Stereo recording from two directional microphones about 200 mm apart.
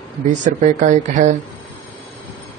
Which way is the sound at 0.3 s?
40° right (ahead or behind).